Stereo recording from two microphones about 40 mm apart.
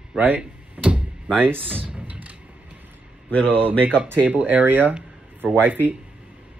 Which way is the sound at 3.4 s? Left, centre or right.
Right.